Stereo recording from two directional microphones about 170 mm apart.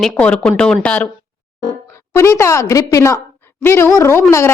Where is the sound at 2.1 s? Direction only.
15° left (ahead or behind).